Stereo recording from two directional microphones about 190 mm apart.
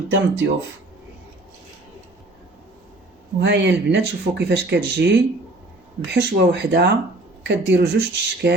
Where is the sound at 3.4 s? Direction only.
70° right (ahead or behind).